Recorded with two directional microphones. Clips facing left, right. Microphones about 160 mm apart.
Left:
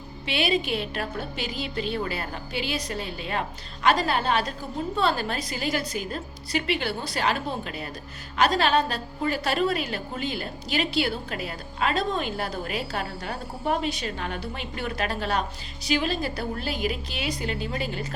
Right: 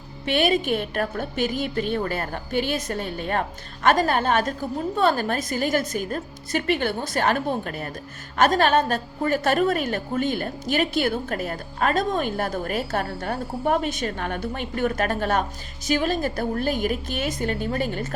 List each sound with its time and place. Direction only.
0.3 s a woman's voice: 50° right (ahead or behind)